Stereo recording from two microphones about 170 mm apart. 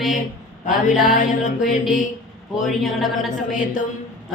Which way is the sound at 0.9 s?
50° left (ahead or behind).